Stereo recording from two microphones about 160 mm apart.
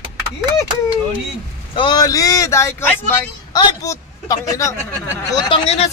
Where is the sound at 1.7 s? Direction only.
30° left (ahead or behind).